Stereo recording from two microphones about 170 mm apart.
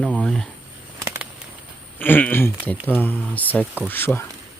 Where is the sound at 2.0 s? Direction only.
10° left (ahead or behind).